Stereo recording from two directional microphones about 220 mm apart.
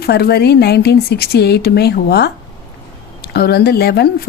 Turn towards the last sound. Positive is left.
turn(degrees=45)  # may be behind; listen again after turning